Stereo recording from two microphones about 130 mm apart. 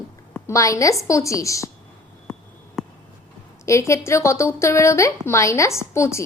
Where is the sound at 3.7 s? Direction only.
20° left (ahead or behind).